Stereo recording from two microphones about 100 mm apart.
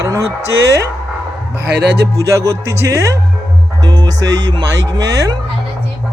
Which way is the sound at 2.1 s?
30° right (ahead or behind).